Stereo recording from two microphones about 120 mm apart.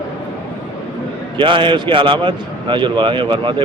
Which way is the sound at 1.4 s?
45° right (ahead or behind).